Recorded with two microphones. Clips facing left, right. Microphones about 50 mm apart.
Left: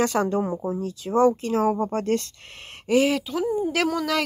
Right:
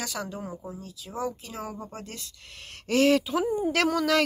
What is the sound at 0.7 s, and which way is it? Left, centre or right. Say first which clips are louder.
Speech: left 12 dB; left.